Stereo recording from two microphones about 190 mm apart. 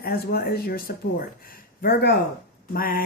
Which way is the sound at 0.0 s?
55° left (ahead or behind).